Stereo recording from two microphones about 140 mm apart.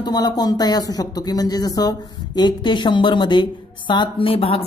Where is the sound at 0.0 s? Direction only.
30° left (ahead or behind).